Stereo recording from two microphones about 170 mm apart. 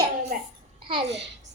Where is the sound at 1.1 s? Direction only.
90° right.